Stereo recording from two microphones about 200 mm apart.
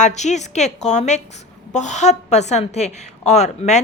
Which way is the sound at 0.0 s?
35° left (ahead or behind).